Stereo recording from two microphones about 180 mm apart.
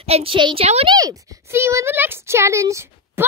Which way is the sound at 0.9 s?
20° right (ahead or behind).